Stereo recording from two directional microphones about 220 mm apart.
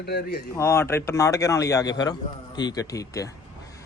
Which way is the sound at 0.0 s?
45° left (ahead or behind).